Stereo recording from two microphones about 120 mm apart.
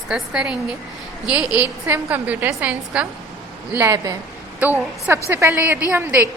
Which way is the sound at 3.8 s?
25° right (ahead or behind).